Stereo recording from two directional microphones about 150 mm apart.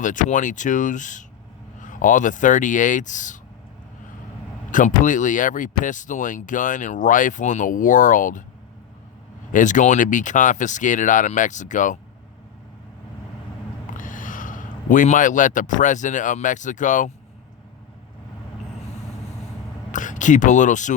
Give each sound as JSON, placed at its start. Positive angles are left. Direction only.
{"t": 0.0, "sound": "speech", "side_deg": 60}
{"t": 4.7, "sound": "speech", "side_deg": 60}
{"t": 9.5, "sound": "speech", "side_deg": 60}
{"t": 13.9, "sound": "a man's voice", "side_deg": 60}
{"t": 19.9, "sound": "speech", "side_deg": 60}